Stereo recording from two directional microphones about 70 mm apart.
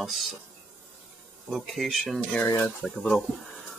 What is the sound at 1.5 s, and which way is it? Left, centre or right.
Speech, centre.